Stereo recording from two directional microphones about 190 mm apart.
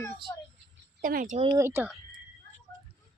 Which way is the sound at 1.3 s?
30° right (ahead or behind).